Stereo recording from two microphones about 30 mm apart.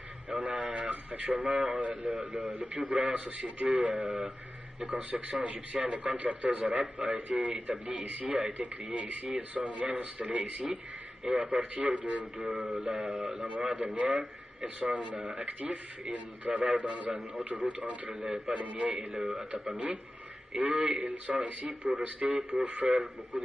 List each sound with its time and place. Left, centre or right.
0.3 s a man's voice: right
11.2 s a man's voice: centre
11.7 s a man's voice: right
12.6 s mantra: right
13.7 s a man's voice: right